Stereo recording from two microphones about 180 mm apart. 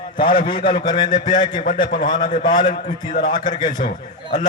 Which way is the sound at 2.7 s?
45° left (ahead or behind).